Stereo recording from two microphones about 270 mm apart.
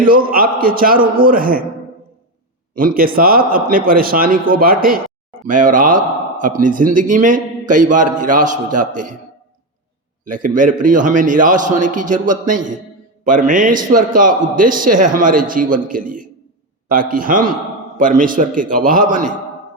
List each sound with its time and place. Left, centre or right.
0.0 s a man's voice: right
2.7 s a man's voice: right
10.2 s a man's voice: right